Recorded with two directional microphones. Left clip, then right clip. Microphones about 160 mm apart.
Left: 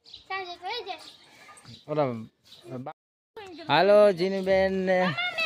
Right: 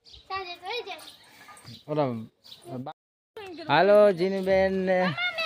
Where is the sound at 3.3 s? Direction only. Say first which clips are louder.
Right 2 dB; 80° right.